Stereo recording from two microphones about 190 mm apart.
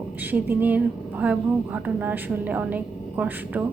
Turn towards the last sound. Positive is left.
turn(degrees=-10)  # may be behind; listen again after turning